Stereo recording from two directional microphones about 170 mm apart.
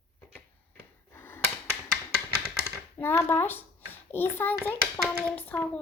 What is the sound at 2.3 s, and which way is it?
Typewriter, 35° right (ahead or behind).